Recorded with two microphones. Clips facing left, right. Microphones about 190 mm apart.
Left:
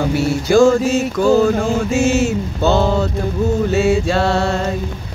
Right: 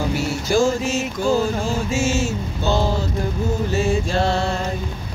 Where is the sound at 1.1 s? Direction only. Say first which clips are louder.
Left 7 dB; 65° left (ahead or behind).